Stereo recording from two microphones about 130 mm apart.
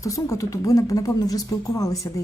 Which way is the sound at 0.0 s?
25° left (ahead or behind).